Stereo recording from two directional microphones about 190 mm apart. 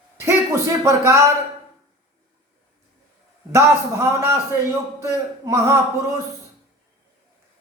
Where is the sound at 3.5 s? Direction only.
15° right (ahead or behind).